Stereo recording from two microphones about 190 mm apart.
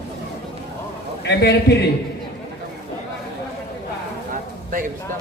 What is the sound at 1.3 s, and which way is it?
Speech, 60° left (ahead or behind).